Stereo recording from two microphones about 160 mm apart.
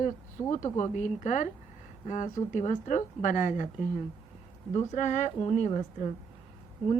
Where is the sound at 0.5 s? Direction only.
45° left (ahead or behind).